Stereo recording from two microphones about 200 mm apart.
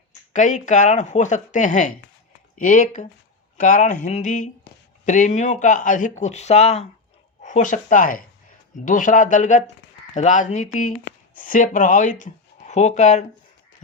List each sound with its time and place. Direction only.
0.3 s speech: 40° left (ahead or behind)